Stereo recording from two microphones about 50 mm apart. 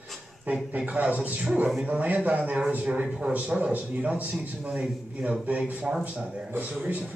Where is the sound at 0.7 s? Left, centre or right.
Right.